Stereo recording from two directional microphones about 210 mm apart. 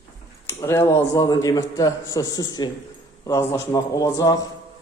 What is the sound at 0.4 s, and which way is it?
Speech, 15° left (ahead or behind).